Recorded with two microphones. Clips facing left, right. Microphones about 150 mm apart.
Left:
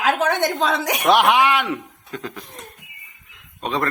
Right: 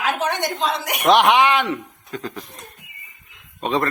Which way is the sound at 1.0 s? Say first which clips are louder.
Right 2 dB; centre (ahead or behind).